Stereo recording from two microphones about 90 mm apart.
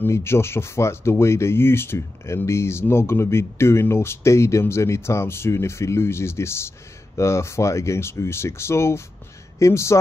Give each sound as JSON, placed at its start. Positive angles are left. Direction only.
{"t": 0.0, "sound": "speech", "side_deg": 30}